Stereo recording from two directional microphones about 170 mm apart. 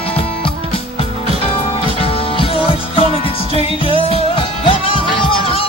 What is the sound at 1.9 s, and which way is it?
Music, 35° left (ahead or behind).